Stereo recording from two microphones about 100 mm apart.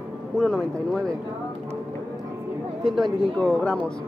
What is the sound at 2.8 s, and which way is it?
Speech, centre (ahead or behind).